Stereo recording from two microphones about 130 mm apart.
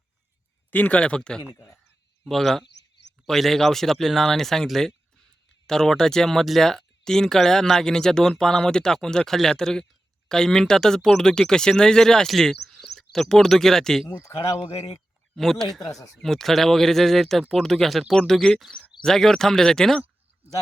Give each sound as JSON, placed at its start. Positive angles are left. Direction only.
{"t": 0.7, "sound": "speech", "side_deg": 15}
{"t": 1.5, "sound": "speech", "side_deg": 20}
{"t": 2.2, "sound": "speech", "side_deg": 0}
{"t": 14.1, "sound": "speech", "side_deg": 20}
{"t": 14.7, "sound": "speech", "side_deg": 50}
{"t": 15.4, "sound": "speech", "side_deg": 0}
{"t": 15.8, "sound": "speech", "side_deg": 25}
{"t": 16.1, "sound": "speech", "side_deg": 5}